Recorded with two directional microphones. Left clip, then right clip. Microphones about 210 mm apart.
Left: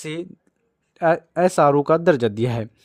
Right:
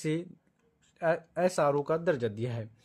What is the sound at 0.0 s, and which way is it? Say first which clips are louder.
Speech: left 3 dB; 40° left (ahead or behind).